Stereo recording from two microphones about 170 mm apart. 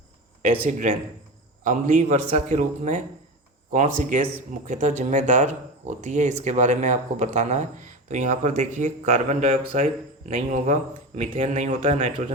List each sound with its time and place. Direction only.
1.6 s speech: 45° right (ahead or behind)